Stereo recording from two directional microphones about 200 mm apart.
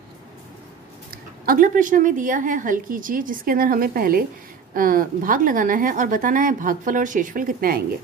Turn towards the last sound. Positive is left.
turn(degrees=-45)  # may be behind; listen again after turning